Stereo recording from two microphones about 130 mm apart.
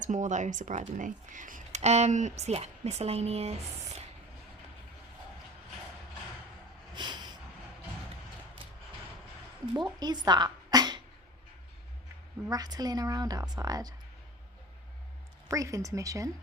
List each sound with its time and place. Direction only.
0.0 s speech: 70° right (ahead or behind); by 3.5 s 55° right (ahead or behind)
6.9 s a sound: 35° right (ahead or behind)
10.0 s dog: 30° right (ahead or behind)
12.5 s speech: 30° right (ahead or behind)
15.4 s speech: 25° right (ahead or behind)